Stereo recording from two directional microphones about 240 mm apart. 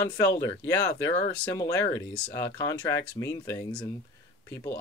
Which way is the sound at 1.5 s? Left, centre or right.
Centre.